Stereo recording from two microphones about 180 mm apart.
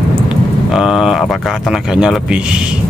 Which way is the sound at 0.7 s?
Centre (ahead or behind).